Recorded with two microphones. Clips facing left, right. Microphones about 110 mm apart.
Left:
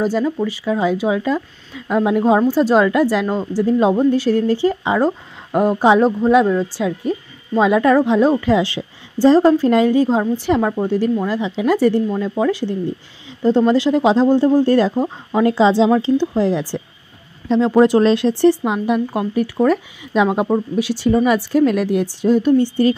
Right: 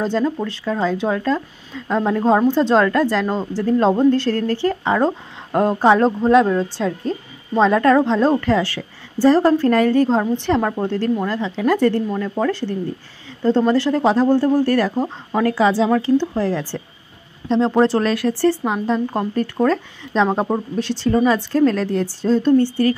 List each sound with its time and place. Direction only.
0.0 s speech: 5° left (ahead or behind)
17.5 s speech: centre (ahead or behind)
17.8 s speech: 20° left (ahead or behind)